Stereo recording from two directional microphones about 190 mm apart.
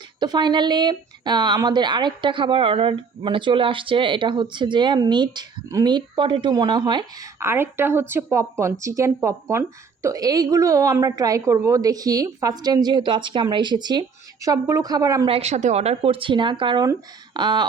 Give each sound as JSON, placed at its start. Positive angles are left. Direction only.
{"t": 0.2, "sound": "a woman's voice", "side_deg": -25}
{"t": 15.3, "sound": "speech", "side_deg": -35}